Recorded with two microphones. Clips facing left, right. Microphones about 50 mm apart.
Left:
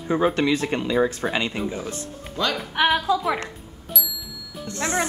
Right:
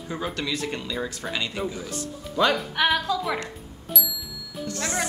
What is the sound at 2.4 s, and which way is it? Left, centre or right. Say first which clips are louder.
Speech: right 4 dB; right.